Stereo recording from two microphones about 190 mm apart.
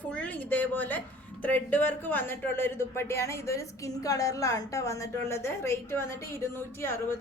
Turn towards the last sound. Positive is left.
turn(degrees=15)  # may be behind; listen again after turning